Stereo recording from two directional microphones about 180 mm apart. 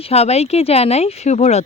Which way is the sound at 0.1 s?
35° left (ahead or behind).